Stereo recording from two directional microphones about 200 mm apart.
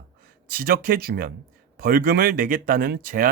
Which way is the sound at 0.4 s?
45° right (ahead or behind).